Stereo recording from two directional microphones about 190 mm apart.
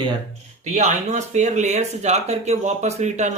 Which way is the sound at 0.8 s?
40° right (ahead or behind).